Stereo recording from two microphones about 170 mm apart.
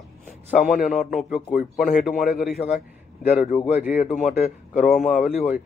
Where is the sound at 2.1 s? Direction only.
50° left (ahead or behind).